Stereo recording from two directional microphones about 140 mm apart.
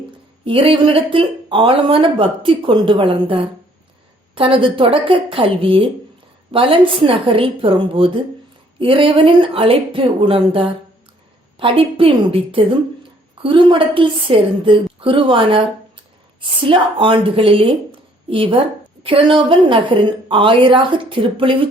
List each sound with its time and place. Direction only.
0.4 s a woman's voice: 40° right (ahead or behind)